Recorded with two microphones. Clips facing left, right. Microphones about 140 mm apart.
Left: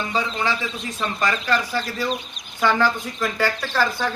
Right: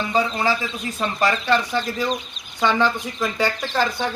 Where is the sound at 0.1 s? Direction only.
35° right (ahead or behind).